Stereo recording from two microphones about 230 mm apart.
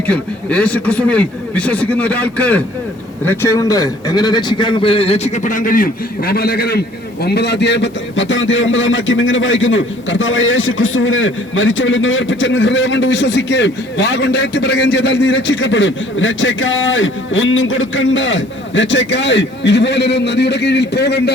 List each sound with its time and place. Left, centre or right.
0.1 s a man's voice: centre; by 21.3 s left